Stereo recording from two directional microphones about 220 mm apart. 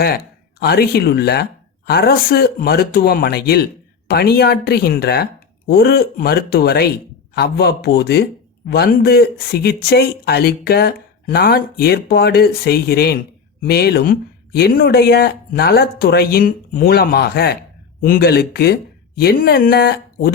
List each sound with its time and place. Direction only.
0.6 s a man's voice: 45° left (ahead or behind)